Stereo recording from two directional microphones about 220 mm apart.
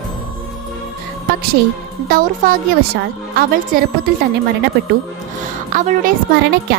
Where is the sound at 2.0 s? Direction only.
40° right (ahead or behind).